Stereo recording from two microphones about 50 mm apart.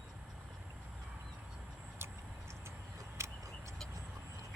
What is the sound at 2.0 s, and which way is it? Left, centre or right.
Vehicle, right.